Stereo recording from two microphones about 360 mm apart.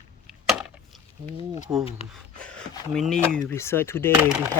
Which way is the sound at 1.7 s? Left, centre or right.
Centre.